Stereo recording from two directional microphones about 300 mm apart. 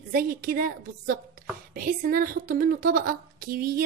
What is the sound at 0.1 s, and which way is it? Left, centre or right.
A woman's voice, right.